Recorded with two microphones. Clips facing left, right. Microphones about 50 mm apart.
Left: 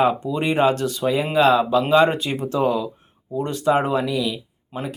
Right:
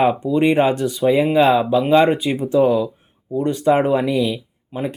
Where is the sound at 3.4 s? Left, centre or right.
Right.